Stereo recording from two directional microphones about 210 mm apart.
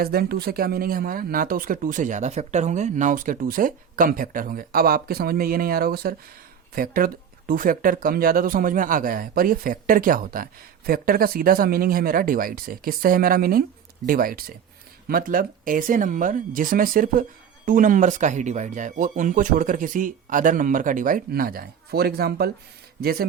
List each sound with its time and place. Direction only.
0.0 s a man's voice: 45° right (ahead or behind)